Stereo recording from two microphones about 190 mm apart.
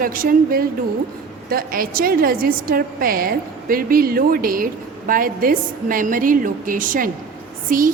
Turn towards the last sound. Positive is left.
turn(degrees=-45)  # may be behind; listen again after turning